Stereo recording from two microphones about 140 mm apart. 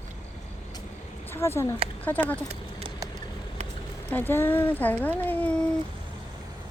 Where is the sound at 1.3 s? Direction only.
20° left (ahead or behind).